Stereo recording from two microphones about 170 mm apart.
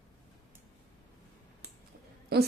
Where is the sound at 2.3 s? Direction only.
70° right (ahead or behind).